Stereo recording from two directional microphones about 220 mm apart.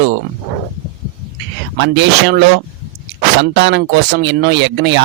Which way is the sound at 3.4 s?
50° right (ahead or behind).